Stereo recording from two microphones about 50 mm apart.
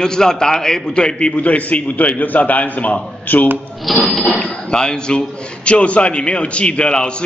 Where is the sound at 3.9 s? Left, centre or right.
Centre.